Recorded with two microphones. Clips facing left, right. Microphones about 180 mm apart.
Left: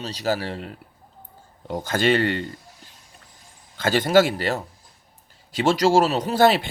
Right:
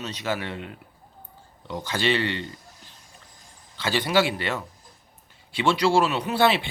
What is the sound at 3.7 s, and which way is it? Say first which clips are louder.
Speech: left 5 dB; 45° left (ahead or behind).